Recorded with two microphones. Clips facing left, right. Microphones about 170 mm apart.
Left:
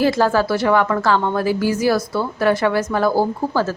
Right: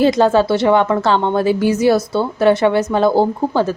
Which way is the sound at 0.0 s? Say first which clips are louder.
Right 4 dB; 20° right (ahead or behind).